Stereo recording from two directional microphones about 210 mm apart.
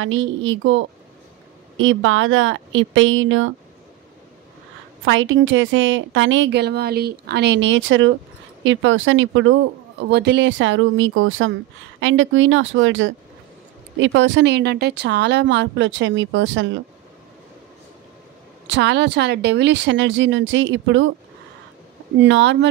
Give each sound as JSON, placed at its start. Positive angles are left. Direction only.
{"t": 0.0, "sound": "speech", "side_deg": -70}
{"t": 5.0, "sound": "a woman's voice", "side_deg": -70}
{"t": 10.0, "sound": "a woman's voice", "side_deg": -55}
{"t": 18.7, "sound": "a woman's voice", "side_deg": -60}
{"t": 22.2, "sound": "a woman's voice", "side_deg": -60}